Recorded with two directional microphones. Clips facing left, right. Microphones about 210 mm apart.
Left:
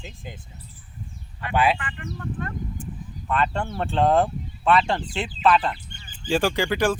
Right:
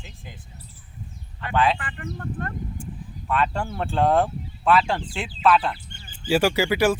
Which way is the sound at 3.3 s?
Centre (ahead or behind).